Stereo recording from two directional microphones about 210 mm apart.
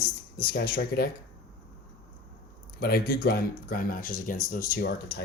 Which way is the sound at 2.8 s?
45° left (ahead or behind).